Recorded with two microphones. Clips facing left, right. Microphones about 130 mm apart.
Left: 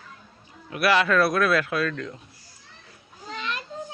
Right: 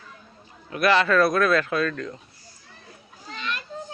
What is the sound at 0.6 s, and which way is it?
A man's voice, 5° left (ahead or behind).